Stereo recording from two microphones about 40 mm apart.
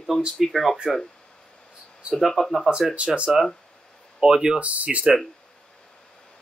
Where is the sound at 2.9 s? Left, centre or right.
Right.